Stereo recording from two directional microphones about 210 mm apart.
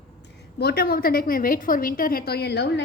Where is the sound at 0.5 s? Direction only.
50° left (ahead or behind).